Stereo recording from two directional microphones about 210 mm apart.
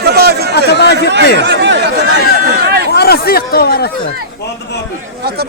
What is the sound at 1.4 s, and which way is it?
Speech, 55° right (ahead or behind).